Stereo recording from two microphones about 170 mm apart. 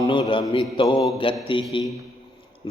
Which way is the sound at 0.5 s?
30° left (ahead or behind).